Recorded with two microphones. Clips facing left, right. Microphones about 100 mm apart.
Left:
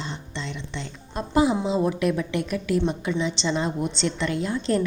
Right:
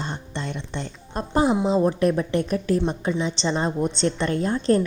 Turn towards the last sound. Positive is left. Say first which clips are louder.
# right 4 dB
turn(degrees=-40)  # may be behind; listen again after turning